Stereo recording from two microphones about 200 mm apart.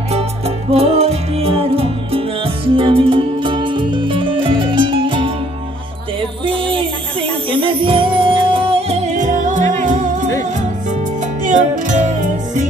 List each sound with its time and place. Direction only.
0.7 s music: 30° right (ahead or behind)
6.4 s music: 25° right (ahead or behind)
11.4 s music: 40° right (ahead or behind)